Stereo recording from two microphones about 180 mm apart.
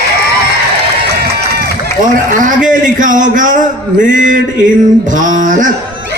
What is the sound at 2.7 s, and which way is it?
A man's voice, 45° right (ahead or behind).